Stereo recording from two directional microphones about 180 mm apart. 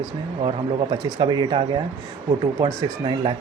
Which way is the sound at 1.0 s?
25° right (ahead or behind).